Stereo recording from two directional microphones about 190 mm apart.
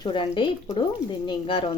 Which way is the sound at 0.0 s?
25° left (ahead or behind).